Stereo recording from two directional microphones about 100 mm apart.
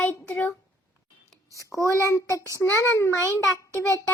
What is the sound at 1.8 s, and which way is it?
A child's voice, 30° left (ahead or behind).